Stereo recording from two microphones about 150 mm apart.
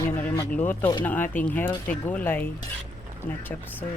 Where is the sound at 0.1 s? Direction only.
10° left (ahead or behind).